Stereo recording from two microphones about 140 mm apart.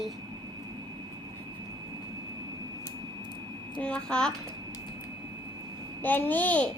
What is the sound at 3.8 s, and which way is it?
Speech, 5° left (ahead or behind).